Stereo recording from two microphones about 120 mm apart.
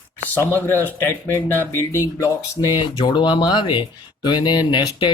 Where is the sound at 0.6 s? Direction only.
20° left (ahead or behind).